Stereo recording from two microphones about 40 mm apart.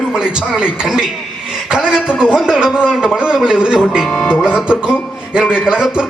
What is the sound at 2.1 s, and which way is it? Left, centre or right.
A man's voice, centre.